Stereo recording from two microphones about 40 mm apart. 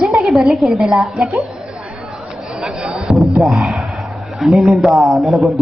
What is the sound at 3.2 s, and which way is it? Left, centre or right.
A man's voice, centre.